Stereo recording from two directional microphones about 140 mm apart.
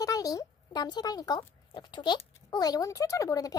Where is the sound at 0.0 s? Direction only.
25° left (ahead or behind).